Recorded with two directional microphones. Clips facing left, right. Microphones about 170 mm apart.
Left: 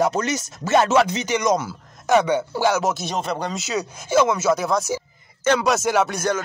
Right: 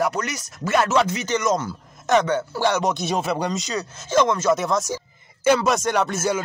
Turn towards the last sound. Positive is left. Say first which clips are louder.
# left 1 dB
turn(degrees=-5)  # may be behind; listen again after turning